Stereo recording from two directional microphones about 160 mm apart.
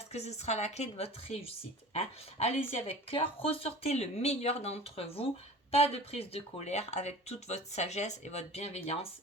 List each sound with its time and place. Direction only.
0.1 s speech: 45° left (ahead or behind)